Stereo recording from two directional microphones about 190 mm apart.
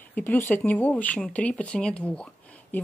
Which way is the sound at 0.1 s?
10° left (ahead or behind).